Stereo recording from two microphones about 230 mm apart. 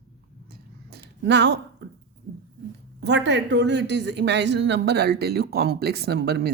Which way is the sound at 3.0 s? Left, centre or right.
Right.